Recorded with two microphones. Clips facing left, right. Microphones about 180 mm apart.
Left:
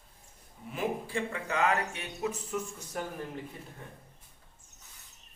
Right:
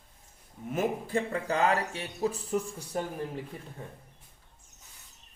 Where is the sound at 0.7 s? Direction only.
45° right (ahead or behind).